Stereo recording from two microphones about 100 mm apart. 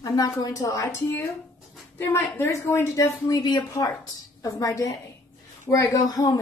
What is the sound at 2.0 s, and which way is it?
Speech, 25° left (ahead or behind).